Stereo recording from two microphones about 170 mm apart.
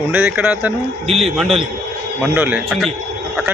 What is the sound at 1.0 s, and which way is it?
Speech, 35° right (ahead or behind).